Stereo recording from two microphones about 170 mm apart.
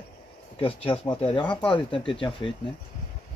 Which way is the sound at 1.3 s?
30° left (ahead or behind).